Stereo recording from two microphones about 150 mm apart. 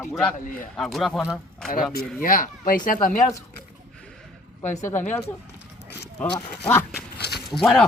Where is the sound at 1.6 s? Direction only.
80° left.